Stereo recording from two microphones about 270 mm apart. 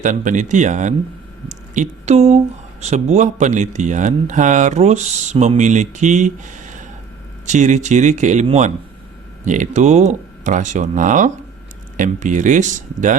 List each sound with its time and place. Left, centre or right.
0.0 s speech: right